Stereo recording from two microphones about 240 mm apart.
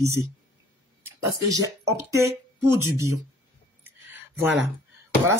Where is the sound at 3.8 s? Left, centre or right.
Centre.